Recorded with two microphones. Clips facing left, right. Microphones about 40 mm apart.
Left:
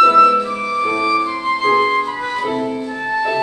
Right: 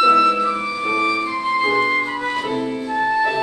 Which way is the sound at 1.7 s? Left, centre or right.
Centre.